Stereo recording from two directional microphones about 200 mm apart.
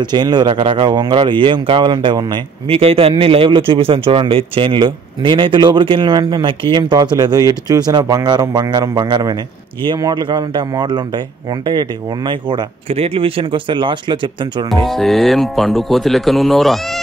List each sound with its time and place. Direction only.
0.0 s speech: 20° right (ahead or behind)
14.9 s speech: centre (ahead or behind)